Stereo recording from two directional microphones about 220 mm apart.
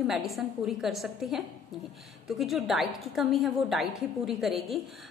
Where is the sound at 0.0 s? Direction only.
Centre (ahead or behind).